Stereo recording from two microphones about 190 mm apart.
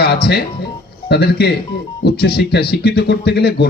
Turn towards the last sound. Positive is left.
turn(degrees=55)  # may be behind; listen again after turning